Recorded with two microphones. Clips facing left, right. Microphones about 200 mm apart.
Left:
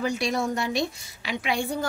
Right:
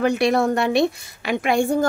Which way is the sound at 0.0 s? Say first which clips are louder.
Right 8 dB; 65° right (ahead or behind).